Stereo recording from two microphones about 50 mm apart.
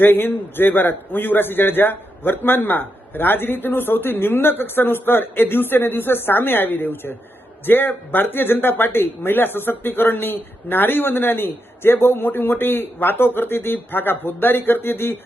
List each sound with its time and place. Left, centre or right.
0.0 s speech: left